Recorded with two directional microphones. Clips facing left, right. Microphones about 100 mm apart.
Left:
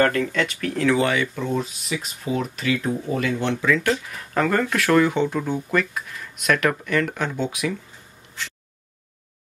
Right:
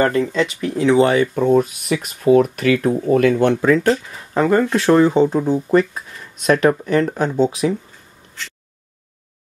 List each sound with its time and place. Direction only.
0.0 s speech: 20° right (ahead or behind)
1.0 s speech: 40° right (ahead or behind)
3.8 s speech: 25° right (ahead or behind)